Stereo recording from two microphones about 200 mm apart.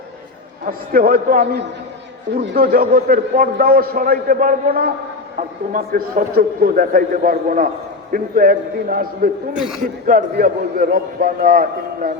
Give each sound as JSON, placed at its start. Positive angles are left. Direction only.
{"t": 0.6, "sound": "a man's voice", "side_deg": -45}
{"t": 9.6, "sound": "speech", "side_deg": 0}
{"t": 10.1, "sound": "a man's voice", "side_deg": -45}